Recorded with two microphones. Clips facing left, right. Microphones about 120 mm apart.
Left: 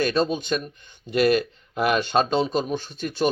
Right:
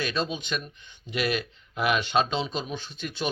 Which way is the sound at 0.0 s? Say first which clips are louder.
Left 7 dB; 45° left (ahead or behind).